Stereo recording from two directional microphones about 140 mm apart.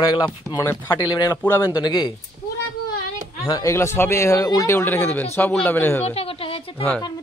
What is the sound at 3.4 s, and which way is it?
Speech, 25° left (ahead or behind).